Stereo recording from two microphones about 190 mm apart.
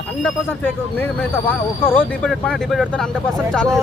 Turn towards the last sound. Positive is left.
turn(degrees=5)  # may be behind; listen again after turning